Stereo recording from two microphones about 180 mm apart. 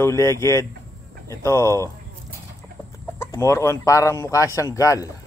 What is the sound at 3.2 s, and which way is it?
Speech, 15° left (ahead or behind).